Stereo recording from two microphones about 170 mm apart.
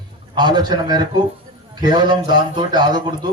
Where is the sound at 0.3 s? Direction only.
25° right (ahead or behind).